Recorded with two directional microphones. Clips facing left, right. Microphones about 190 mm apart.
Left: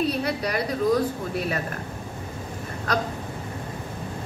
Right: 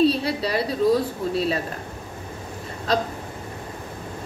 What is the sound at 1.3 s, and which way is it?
Speech, 25° right (ahead or behind).